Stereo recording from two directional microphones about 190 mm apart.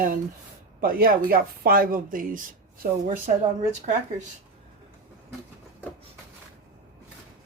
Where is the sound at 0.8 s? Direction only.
50° right (ahead or behind).